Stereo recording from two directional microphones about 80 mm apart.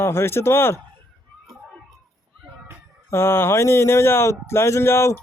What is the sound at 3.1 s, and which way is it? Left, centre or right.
Speech, left.